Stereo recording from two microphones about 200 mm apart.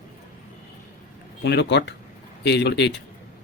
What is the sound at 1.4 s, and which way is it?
A man's voice, 60° left (ahead or behind).